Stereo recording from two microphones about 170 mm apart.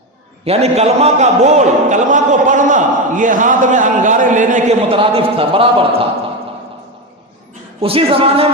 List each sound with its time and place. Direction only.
0.4 s a man's voice: 35° right (ahead or behind)
4.9 s a man's voice: 35° right (ahead or behind)
7.8 s a man's voice: 35° right (ahead or behind)